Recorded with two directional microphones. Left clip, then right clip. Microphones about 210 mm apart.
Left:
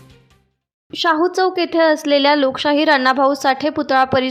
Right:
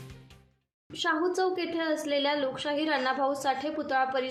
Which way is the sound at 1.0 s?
50° left (ahead or behind).